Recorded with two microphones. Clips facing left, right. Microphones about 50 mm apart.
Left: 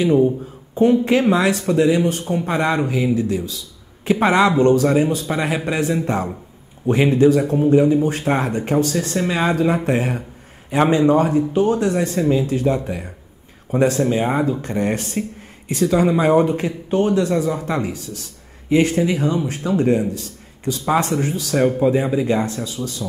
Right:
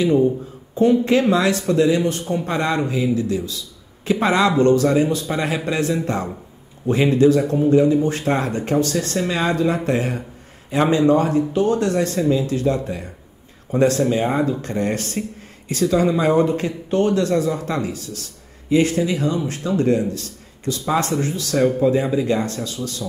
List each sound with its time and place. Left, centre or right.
0.0 s speech: centre
1.3 s speech: left